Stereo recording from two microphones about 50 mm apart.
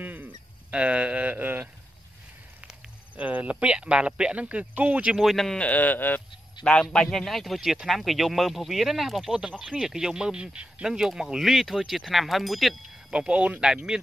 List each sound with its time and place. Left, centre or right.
0.0 s a sound: right
0.7 s speech: right
3.2 s speech: right
5.1 s speech: centre
5.6 s speech: left
6.8 s speech: centre
13.1 s speech: right